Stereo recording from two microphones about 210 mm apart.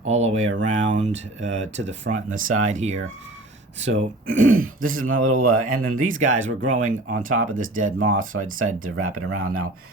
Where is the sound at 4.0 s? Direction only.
35° right (ahead or behind).